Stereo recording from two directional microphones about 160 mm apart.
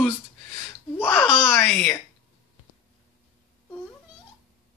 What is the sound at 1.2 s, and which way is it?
Speech, 5° right (ahead or behind).